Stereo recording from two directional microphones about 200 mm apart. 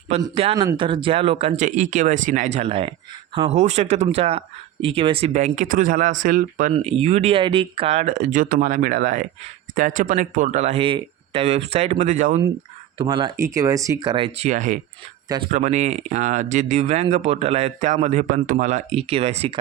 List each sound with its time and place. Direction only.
0.1 s speech: 30° right (ahead or behind)
13.0 s speech: 25° right (ahead or behind)